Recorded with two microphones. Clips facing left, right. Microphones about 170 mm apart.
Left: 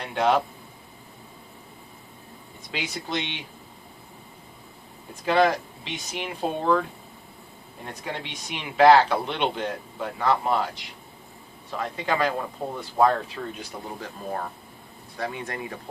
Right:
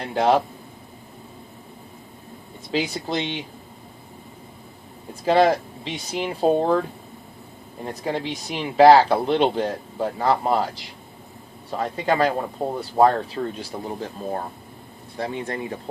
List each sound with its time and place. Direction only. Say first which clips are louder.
0.0 s speech: right 3 dB; 35° right (ahead or behind)
2.7 s speech: right 6 dB; 35° right (ahead or behind)
5.2 s speech: right 4 dB; 35° right (ahead or behind)
8.0 s speech: right 8 dB; 35° right (ahead or behind)